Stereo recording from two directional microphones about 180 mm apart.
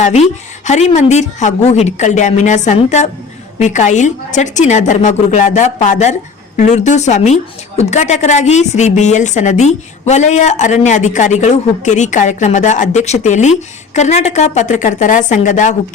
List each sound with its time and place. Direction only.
0.0 s a woman's voice: 40° left (ahead or behind)